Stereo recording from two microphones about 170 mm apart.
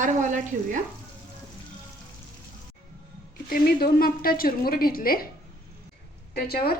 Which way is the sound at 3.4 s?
60° left (ahead or behind).